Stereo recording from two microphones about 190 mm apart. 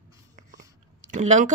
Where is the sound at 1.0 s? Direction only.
40° right (ahead or behind).